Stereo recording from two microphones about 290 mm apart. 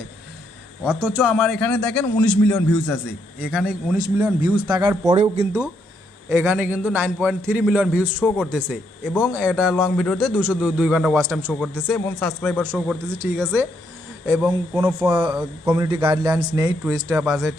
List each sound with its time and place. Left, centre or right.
0.9 s a man's voice: centre
3.4 s a man's voice: centre
5.1 s speech: right
6.2 s a man's voice: centre
12.7 s a man's voice: centre
17.2 s a man's voice: centre